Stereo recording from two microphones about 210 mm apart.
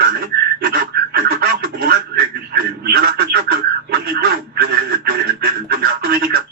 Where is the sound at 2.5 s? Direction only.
50° right (ahead or behind).